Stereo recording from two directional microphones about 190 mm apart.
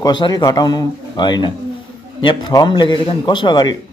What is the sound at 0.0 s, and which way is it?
A man's voice, 20° left (ahead or behind).